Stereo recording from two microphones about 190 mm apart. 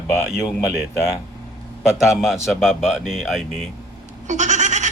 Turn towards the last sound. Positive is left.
turn(degrees=-40)  # may be behind; listen again after turning